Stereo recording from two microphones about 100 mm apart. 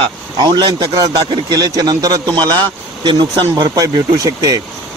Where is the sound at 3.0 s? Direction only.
50° right (ahead or behind).